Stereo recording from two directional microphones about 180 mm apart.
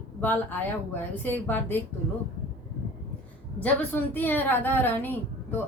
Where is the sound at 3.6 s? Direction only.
10° left (ahead or behind).